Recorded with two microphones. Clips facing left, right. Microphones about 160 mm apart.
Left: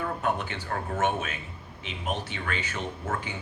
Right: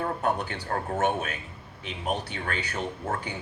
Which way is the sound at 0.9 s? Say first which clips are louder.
Even; 40° right (ahead or behind).